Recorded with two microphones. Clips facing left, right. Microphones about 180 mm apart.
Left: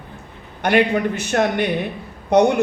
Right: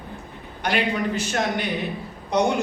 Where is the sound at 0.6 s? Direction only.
55° left (ahead or behind).